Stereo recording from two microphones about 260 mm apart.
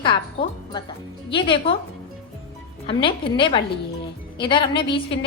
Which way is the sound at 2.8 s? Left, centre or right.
Centre.